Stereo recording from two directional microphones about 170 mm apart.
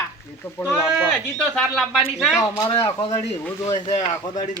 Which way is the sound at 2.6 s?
30° left (ahead or behind).